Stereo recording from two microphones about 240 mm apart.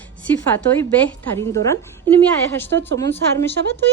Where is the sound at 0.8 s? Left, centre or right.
Centre.